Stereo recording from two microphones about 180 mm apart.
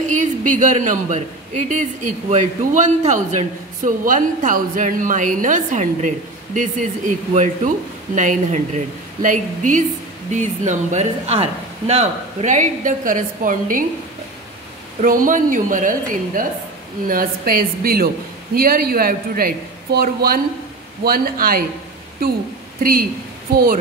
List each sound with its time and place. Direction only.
0.0 s a man's voice: 45° right (ahead or behind)
15.0 s a man's voice: 50° right (ahead or behind)